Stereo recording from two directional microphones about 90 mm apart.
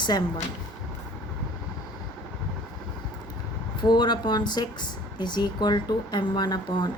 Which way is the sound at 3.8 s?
55° left (ahead or behind).